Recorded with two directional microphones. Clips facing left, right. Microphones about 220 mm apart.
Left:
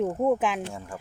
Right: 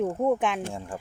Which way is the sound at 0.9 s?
25° right (ahead or behind).